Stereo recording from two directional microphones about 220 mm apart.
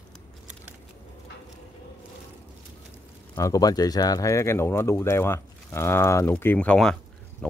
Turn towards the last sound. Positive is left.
turn(degrees=5)  # may be behind; listen again after turning